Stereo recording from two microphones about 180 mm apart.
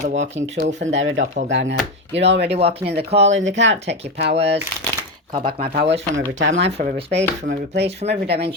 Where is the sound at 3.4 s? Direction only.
90° right.